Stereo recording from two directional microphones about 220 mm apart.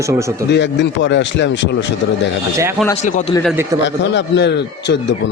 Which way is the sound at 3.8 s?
55° left (ahead or behind).